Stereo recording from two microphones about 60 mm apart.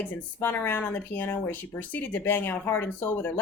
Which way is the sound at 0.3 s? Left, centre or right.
Left.